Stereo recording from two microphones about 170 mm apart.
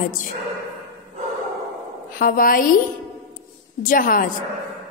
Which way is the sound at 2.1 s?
55° left (ahead or behind).